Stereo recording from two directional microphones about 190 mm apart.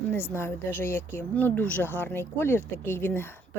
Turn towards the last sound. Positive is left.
turn(degrees=10)  # may be behind; listen again after turning